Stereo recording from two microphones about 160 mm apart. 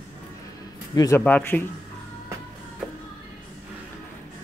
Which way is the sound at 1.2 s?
10° left (ahead or behind).